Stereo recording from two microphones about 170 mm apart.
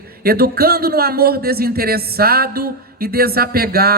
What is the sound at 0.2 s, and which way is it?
Speech, 65° right (ahead or behind).